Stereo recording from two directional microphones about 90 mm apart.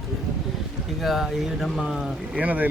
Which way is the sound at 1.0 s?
Centre (ahead or behind).